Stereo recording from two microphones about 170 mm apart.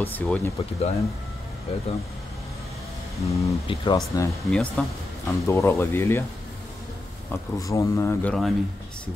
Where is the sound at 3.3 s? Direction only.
20° left (ahead or behind).